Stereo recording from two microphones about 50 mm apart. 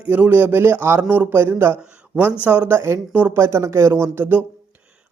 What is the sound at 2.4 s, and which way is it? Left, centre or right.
Speech, right.